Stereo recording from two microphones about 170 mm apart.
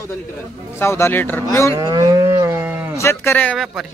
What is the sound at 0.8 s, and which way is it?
Speech, 15° left (ahead or behind).